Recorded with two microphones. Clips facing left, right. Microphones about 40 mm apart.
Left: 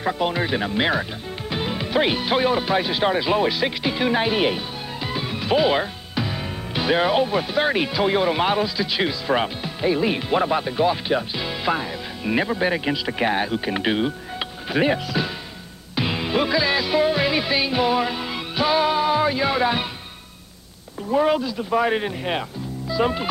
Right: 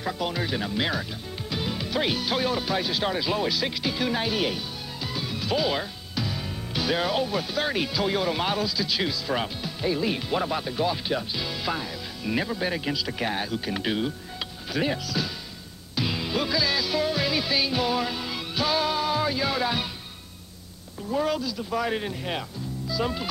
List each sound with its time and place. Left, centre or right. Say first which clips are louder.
0.0 s speech: left 6 dB; left
16.0 s music: left 5 dB; left
21.1 s speech: left 7 dB; left